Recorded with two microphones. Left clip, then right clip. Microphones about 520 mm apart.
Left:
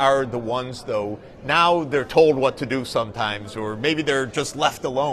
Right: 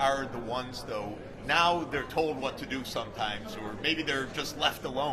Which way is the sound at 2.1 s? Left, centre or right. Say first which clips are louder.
Left 16 dB; left.